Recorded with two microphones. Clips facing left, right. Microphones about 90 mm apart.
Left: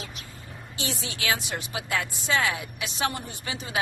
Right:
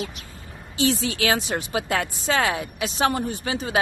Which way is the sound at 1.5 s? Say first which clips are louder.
Right 6 dB; 40° right (ahead or behind).